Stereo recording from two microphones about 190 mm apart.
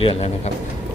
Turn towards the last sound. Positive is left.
turn(degrees=30)  # may be behind; listen again after turning